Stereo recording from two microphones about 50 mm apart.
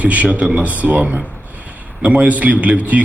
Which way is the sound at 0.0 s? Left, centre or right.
Right.